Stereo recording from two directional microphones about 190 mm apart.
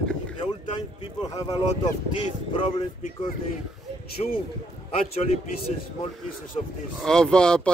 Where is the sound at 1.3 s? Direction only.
20° left (ahead or behind).